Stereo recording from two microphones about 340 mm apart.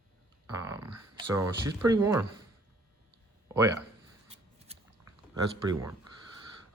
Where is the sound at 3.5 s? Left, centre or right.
Centre.